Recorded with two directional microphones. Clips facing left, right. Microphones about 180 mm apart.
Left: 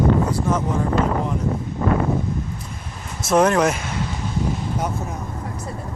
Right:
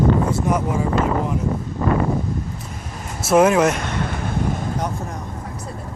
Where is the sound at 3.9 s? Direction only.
55° right (ahead or behind).